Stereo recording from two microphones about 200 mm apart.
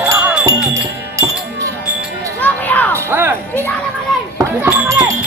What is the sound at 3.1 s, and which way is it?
Music, 10° right (ahead or behind).